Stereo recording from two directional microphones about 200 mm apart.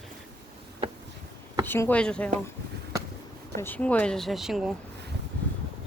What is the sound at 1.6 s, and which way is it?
Speech, 10° left (ahead or behind).